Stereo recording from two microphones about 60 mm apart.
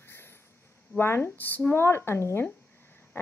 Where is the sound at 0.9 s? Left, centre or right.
Left.